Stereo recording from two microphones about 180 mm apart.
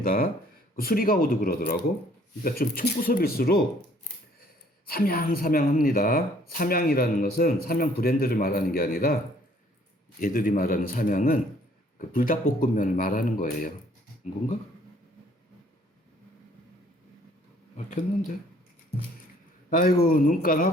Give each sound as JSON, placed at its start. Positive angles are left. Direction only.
{"t": 0.0, "sound": "speech", "side_deg": 50}
{"t": 4.9, "sound": "speech", "side_deg": 55}
{"t": 10.2, "sound": "speech", "side_deg": 50}
{"t": 19.7, "sound": "speech", "side_deg": 55}